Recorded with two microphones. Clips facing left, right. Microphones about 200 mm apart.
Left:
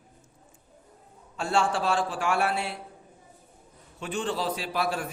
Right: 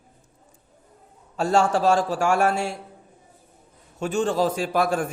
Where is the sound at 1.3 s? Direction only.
40° right (ahead or behind).